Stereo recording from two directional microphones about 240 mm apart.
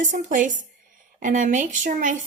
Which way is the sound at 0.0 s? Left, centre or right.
Right.